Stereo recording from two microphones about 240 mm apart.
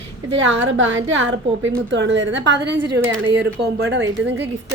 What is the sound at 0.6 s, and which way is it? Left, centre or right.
A woman's voice, right.